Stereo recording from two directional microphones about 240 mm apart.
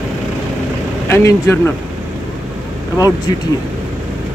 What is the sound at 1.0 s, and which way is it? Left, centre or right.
Speech, centre.